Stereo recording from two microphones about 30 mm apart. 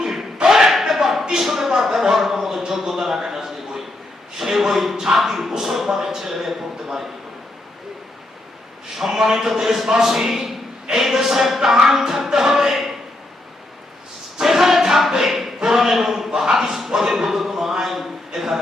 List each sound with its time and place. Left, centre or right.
0.0 s a sound: centre
4.4 s a man's voice: centre
9.1 s a man's voice: centre
14.3 s choir: centre
15.1 s a sound: centre
18.3 s a man's voice: centre